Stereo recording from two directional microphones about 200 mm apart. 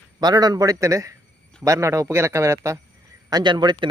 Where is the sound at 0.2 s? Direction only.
20° right (ahead or behind).